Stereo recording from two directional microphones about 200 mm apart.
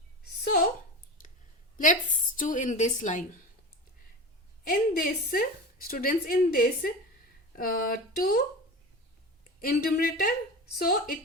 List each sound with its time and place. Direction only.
1.8 s a woman's voice: 40° left (ahead or behind)
4.7 s a woman's voice: 45° left (ahead or behind)
9.6 s a woman's voice: 45° left (ahead or behind)